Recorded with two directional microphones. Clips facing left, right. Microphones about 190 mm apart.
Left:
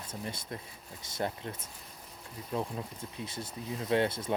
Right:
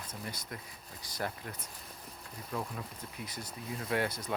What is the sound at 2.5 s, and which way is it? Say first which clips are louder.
Speech: left 4 dB; 25° left (ahead or behind).